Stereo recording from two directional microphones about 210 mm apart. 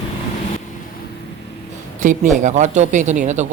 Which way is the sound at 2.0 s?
35° right (ahead or behind).